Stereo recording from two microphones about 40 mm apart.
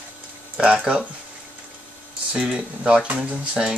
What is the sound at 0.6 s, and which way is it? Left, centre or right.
Speech, right.